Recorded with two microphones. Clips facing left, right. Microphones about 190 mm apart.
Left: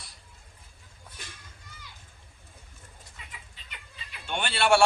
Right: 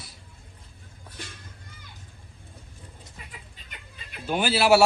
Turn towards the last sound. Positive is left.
turn(degrees=-5)  # may be behind; listen again after turning